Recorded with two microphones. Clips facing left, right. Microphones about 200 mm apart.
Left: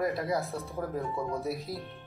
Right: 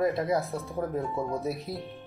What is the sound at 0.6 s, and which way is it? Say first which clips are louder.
Speech: right 3 dB; 15° right (ahead or behind).